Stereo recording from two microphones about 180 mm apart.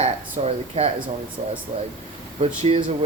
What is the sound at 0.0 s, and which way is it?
Speech, 35° right (ahead or behind).